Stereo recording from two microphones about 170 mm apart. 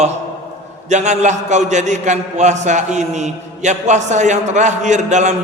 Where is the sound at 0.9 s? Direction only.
45° right (ahead or behind).